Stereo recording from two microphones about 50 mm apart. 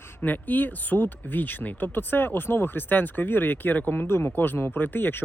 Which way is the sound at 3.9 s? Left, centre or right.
Left.